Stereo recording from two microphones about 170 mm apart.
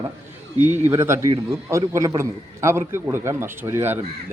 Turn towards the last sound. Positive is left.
turn(degrees=-15)  # may be behind; listen again after turning